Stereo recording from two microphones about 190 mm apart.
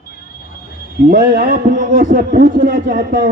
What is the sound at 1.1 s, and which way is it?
A man's voice, 50° right (ahead or behind).